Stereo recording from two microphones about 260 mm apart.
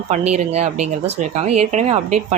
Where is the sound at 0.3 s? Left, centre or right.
Right.